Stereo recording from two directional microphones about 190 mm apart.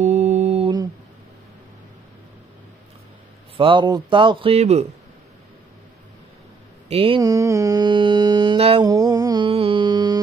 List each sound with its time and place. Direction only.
0.0 s mantra: 35° right (ahead or behind)
3.5 s a man's voice: 25° right (ahead or behind)
6.9 s mantra: 30° right (ahead or behind)
8.8 s music: 20° right (ahead or behind)